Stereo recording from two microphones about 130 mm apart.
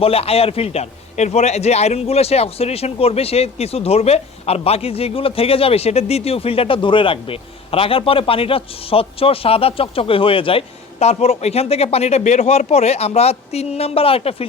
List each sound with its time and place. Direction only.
0.0 s a man's voice: 50° left (ahead or behind)